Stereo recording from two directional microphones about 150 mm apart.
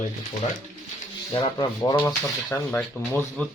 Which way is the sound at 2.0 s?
25° left (ahead or behind).